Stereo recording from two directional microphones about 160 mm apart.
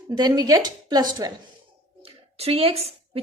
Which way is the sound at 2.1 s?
35° right (ahead or behind).